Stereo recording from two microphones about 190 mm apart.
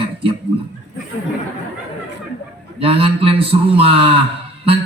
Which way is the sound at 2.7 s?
30° right (ahead or behind).